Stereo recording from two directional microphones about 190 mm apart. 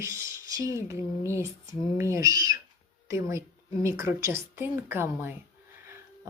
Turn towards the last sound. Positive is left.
turn(degrees=-10)  # may be behind; listen again after turning